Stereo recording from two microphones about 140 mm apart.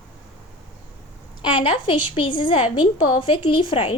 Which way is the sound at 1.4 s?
35° left (ahead or behind).